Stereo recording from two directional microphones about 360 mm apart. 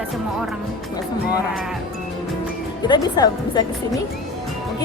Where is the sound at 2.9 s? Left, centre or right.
Centre.